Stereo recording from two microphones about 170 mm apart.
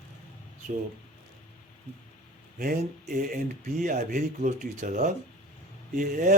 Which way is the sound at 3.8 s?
55° right (ahead or behind).